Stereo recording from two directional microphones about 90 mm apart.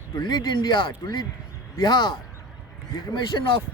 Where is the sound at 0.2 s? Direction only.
55° left (ahead or behind).